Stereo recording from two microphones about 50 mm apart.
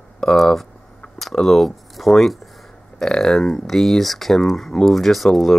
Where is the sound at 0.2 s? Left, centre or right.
Centre.